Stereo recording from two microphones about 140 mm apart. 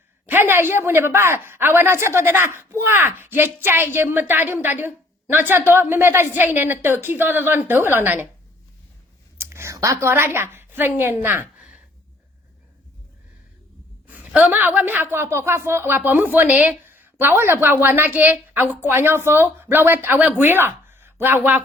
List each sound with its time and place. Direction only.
0.3 s speech: 15° right (ahead or behind)
9.4 s a woman's voice: 20° right (ahead or behind)
14.1 s a woman's voice: 10° right (ahead or behind)